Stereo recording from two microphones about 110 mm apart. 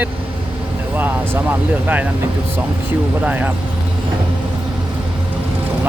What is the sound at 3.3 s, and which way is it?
Speech, 15° right (ahead or behind).